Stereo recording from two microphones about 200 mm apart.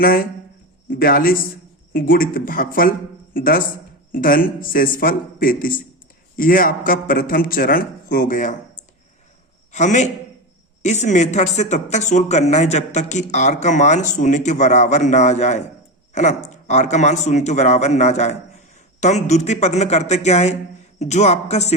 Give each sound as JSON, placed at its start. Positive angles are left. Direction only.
{"t": 0.0, "sound": "a man's voice", "side_deg": 45}
{"t": 9.7, "sound": "speech", "side_deg": 35}